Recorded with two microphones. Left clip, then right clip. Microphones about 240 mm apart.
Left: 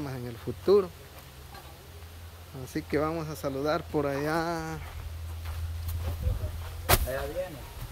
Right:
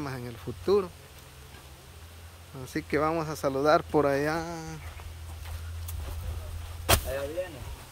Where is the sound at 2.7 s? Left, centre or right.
Centre.